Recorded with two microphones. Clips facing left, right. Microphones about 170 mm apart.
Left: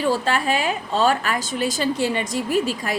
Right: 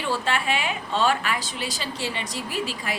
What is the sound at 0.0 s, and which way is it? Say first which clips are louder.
A woman's voice: left 5 dB; 40° left (ahead or behind).